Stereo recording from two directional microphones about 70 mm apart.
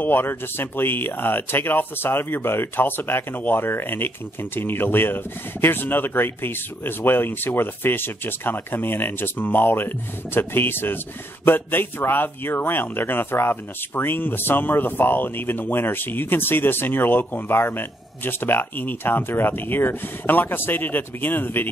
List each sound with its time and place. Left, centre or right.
0.0 s speech: left